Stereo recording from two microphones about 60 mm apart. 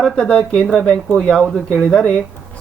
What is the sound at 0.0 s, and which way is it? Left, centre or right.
Speech, centre.